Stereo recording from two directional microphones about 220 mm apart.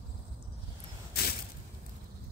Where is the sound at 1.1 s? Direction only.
45° left (ahead or behind).